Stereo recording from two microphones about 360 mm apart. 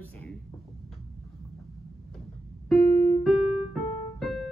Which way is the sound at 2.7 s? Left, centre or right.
Centre.